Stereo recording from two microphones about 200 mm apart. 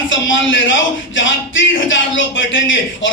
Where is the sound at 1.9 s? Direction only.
70° left (ahead or behind).